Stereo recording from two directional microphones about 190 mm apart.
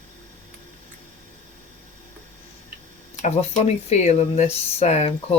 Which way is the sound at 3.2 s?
35° left (ahead or behind).